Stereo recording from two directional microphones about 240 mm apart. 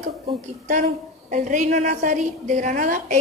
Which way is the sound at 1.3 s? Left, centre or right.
Right.